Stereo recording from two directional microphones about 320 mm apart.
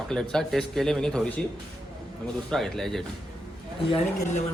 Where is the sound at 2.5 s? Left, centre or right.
Centre.